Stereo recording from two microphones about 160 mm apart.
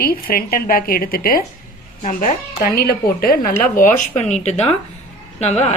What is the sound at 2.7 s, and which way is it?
A woman's voice, 70° left (ahead or behind).